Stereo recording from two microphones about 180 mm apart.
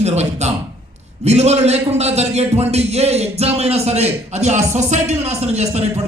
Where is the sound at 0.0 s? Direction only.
40° right (ahead or behind).